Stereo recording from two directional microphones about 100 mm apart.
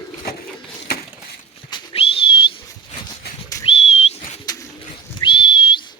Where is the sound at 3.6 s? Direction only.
85° left.